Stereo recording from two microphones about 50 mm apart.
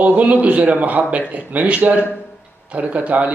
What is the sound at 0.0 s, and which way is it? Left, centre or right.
A man's voice, right.